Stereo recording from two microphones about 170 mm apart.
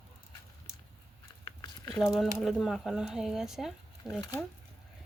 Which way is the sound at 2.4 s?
Centre (ahead or behind).